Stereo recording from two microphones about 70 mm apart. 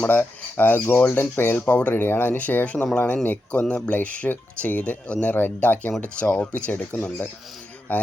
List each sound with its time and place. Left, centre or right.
0.1 s a man's voice: left